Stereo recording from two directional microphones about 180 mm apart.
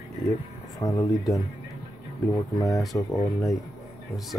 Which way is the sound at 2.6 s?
20° left (ahead or behind).